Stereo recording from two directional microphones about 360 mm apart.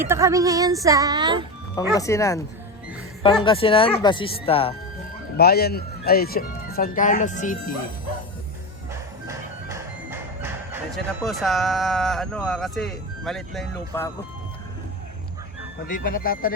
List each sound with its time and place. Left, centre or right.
0.0 s speech: centre
1.7 s speech: centre
5.4 s speech: left
8.9 s music: centre
15.9 s speech: left